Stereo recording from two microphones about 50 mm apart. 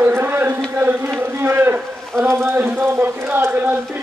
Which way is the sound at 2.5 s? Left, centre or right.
Right.